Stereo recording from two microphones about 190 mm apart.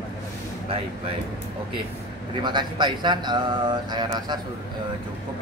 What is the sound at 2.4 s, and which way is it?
Speech, 25° right (ahead or behind).